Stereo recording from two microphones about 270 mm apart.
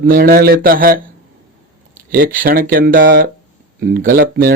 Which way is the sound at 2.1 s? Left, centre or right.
Right.